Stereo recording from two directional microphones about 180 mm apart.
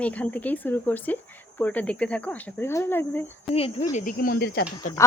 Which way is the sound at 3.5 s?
35° left (ahead or behind).